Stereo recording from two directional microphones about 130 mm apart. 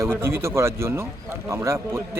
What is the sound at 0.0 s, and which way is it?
A man's voice, 20° right (ahead or behind).